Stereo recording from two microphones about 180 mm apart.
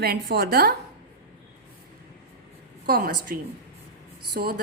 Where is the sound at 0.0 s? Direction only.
60° right (ahead or behind).